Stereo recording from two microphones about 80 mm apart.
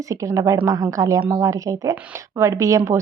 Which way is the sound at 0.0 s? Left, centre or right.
Right.